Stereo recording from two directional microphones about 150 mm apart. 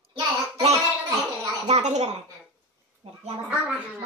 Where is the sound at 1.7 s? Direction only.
50° right (ahead or behind).